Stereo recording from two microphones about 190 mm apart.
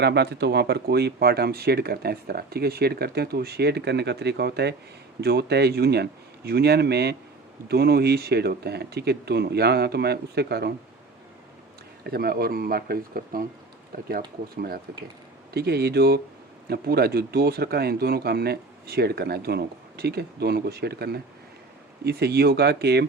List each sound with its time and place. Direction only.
0.0 s speech: 60° right (ahead or behind)
12.0 s speech: 55° right (ahead or behind)
14.5 s speech: 55° right (ahead or behind)